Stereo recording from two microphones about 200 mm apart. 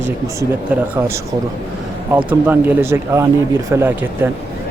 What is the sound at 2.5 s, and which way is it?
Speech, 10° right (ahead or behind).